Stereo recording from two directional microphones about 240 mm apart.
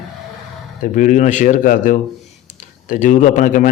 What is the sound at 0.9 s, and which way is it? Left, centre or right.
A man's voice, left.